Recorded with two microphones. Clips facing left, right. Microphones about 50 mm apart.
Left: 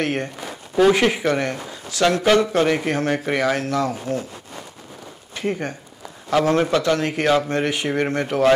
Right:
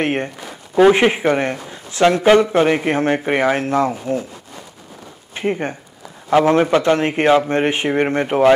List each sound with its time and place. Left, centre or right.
0.0 s a man's voice: right
5.3 s a man's voice: right